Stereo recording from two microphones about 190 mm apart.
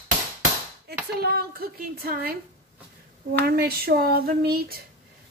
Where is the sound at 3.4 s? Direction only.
55° right (ahead or behind).